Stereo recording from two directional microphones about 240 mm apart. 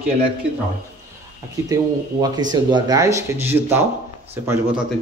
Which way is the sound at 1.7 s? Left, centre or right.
Centre.